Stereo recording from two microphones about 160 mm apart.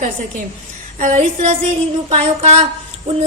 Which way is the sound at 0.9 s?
50° right (ahead or behind).